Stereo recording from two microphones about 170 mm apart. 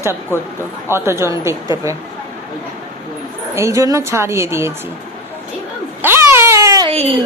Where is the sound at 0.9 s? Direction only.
15° right (ahead or behind).